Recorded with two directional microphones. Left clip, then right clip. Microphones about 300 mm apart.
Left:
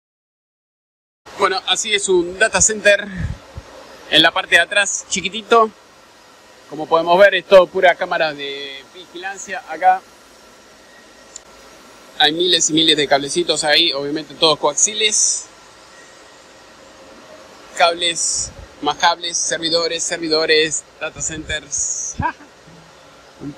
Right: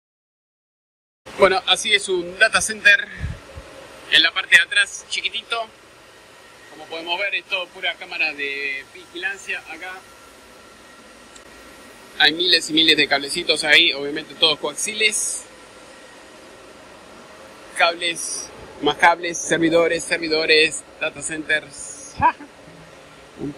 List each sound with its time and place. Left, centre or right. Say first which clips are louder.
1.4 s speech: right 1 dB; centre
4.2 s a man's voice: left 2 dB; centre
6.9 s a man's voice: left 13 dB; left
12.2 s speech: left 2 dB; centre
17.7 s speech: left 4 dB; centre